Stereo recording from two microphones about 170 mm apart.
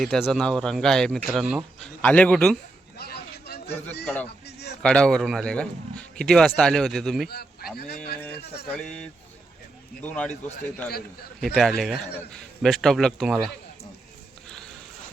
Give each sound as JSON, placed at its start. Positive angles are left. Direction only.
{"t": 0.0, "sound": "a man's voice", "side_deg": 0}
{"t": 3.0, "sound": "a sound", "side_deg": 70}
{"t": 4.8, "sound": "speech", "side_deg": 5}
{"t": 7.3, "sound": "speech", "side_deg": 65}
{"t": 8.6, "sound": "a man's voice", "side_deg": 5}
{"t": 11.3, "sound": "speech", "side_deg": 0}